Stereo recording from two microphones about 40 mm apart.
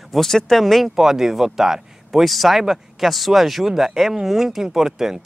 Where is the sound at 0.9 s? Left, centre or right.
Centre.